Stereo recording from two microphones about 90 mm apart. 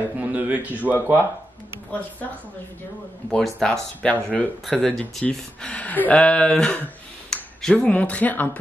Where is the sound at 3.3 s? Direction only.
5° left (ahead or behind).